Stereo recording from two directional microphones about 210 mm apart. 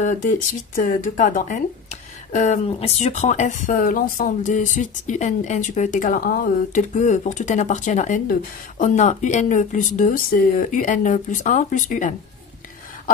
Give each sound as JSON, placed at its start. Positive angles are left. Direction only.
{"t": 0.0, "sound": "speech", "side_deg": 35}